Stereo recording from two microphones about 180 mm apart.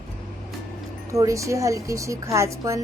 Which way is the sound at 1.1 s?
15° right (ahead or behind).